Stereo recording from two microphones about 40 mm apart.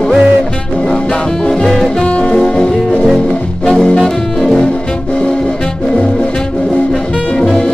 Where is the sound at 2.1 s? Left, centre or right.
Left.